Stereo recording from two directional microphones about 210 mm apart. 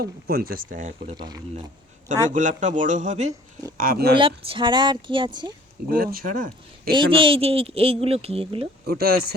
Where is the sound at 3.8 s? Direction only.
45° right (ahead or behind).